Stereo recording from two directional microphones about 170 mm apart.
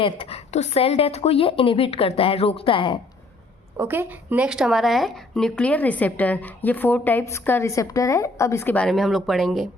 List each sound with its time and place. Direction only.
0.0 s a woman's voice: 35° left (ahead or behind)
3.8 s speech: 10° right (ahead or behind)